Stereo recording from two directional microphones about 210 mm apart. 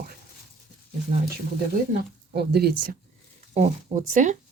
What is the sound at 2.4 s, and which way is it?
Speech, 50° right (ahead or behind).